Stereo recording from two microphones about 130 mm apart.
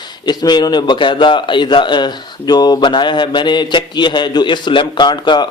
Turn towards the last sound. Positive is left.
turn(degrees=35)  # may be behind; listen again after turning